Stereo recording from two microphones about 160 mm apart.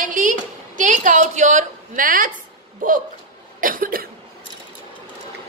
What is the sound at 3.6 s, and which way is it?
Cough, 60° right (ahead or behind).